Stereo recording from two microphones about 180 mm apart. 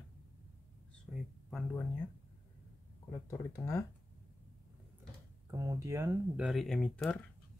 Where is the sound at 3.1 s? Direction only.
15° left (ahead or behind).